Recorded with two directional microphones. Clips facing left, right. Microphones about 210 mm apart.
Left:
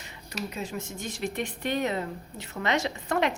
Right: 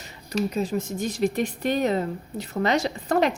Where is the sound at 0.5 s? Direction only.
35° right (ahead or behind).